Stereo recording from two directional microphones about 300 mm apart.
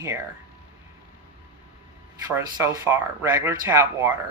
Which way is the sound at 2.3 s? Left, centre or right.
Centre.